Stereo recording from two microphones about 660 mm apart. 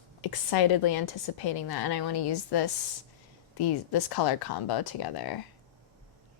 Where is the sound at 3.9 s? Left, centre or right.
Left.